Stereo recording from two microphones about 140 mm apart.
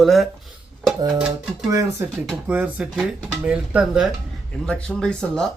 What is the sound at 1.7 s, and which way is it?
Speech, 25° right (ahead or behind).